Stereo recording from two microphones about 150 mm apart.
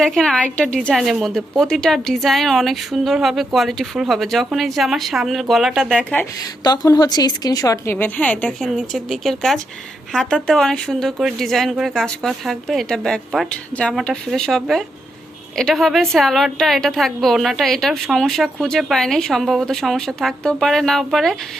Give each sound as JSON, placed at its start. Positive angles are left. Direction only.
{"t": 0.0, "sound": "a woman's voice", "side_deg": 0}
{"t": 6.7, "sound": "speech", "side_deg": 25}
{"t": 7.9, "sound": "a woman's voice", "side_deg": 10}